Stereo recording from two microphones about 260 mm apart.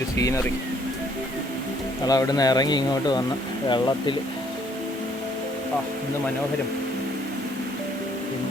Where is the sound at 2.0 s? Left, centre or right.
Centre.